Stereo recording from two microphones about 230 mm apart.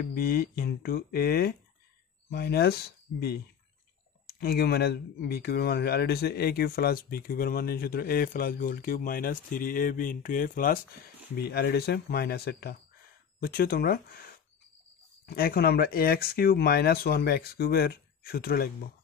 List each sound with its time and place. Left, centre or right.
0.0 s speech: left
15.2 s speech: left